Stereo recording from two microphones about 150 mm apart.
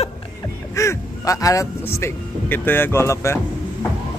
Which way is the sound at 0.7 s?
20° left (ahead or behind).